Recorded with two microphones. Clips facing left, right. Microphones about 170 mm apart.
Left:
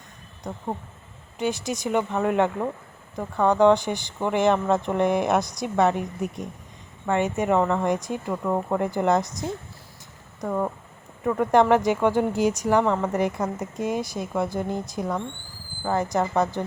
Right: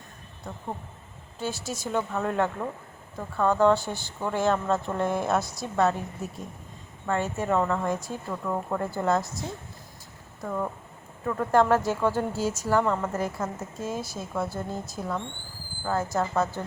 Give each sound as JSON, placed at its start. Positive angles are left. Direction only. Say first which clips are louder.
{"t": 1.4, "sound": "speech", "louder": "left 6 dB", "side_deg": 15}
{"t": 10.4, "sound": "speech", "louder": "left 4 dB", "side_deg": 25}